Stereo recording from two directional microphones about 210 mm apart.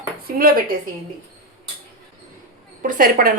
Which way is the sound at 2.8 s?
40° right (ahead or behind).